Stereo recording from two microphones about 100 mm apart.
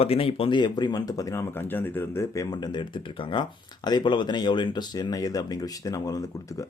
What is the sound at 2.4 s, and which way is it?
Speech, 45° left (ahead or behind).